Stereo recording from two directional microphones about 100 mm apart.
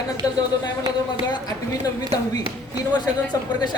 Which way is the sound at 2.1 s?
35° left (ahead or behind).